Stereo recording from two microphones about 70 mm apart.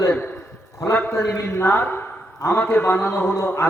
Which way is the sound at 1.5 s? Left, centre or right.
Left.